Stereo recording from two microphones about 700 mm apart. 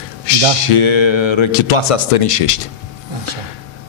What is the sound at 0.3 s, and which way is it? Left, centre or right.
Speech, left.